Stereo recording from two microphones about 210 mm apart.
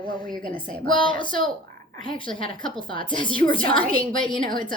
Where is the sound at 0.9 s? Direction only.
25° left (ahead or behind).